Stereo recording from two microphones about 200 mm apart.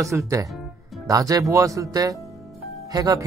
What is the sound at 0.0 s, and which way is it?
Speech, 15° right (ahead or behind).